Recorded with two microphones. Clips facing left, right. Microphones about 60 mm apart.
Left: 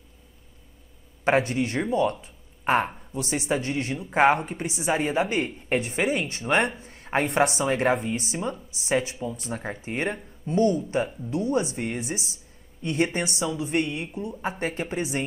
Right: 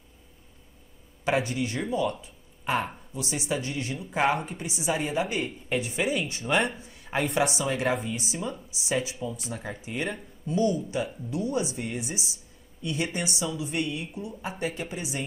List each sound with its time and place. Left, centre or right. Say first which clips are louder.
1.2 s speech: left 4 dB; left
6.8 s a sound: left 4 dB; left
7.3 s speech: left 4 dB; left